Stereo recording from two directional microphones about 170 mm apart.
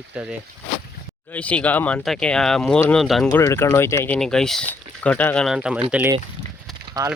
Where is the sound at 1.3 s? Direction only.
5° left (ahead or behind).